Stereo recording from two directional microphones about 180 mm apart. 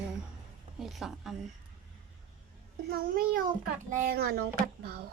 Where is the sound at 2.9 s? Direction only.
55° right (ahead or behind).